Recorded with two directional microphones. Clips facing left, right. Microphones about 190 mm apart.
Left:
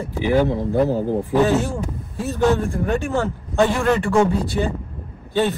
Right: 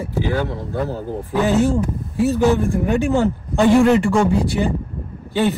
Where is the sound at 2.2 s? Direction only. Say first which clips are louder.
Right 2 dB; 10° right (ahead or behind).